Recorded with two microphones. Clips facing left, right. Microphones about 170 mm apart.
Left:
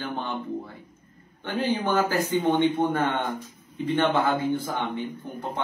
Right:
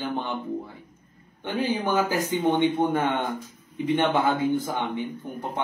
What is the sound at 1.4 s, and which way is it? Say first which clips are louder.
A man's voice: even; 15° right (ahead or behind).